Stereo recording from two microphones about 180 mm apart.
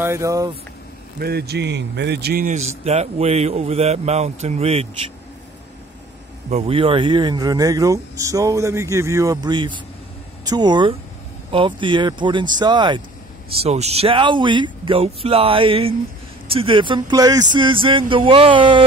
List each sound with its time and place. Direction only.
0.0 s speech: 15° right (ahead or behind)
1.2 s a man's voice: 65° right (ahead or behind)
2.4 s speech: 40° right (ahead or behind)
6.5 s speech: 30° right (ahead or behind)
13.5 s speech: 35° right (ahead or behind)